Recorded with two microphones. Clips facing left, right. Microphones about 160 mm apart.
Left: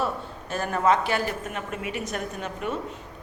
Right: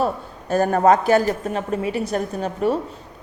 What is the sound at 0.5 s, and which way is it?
A woman's voice, 40° right (ahead or behind).